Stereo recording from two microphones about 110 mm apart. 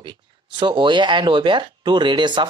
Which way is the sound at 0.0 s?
45° right (ahead or behind).